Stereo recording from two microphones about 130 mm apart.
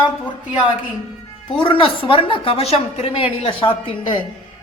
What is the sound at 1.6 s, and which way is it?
A woman's voice, 40° left (ahead or behind).